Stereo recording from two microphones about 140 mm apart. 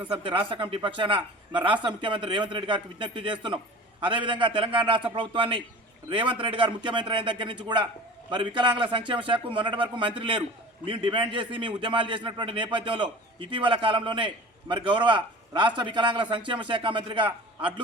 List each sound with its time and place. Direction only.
0.1 s a man's voice: 35° right (ahead or behind)